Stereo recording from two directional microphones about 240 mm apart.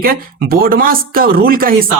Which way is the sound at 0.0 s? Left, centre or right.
Right.